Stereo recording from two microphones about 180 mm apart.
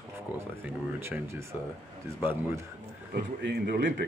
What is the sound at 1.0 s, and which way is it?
Speech, 15° right (ahead or behind).